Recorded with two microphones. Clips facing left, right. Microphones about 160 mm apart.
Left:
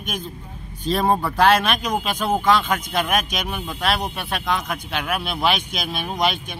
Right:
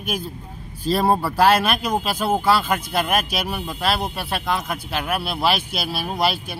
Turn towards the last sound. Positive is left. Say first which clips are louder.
# even
turn(degrees=-5)  # may be behind; listen again after turning